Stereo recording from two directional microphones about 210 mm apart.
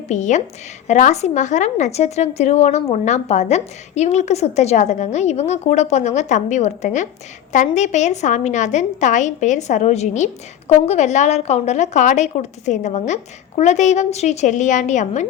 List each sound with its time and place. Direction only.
0.1 s a woman's voice: 35° left (ahead or behind)